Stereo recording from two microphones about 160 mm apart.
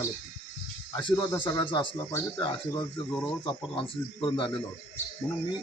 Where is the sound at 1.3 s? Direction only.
15° left (ahead or behind).